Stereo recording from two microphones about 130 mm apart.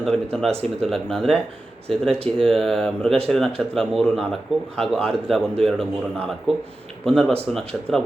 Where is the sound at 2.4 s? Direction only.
5° left (ahead or behind).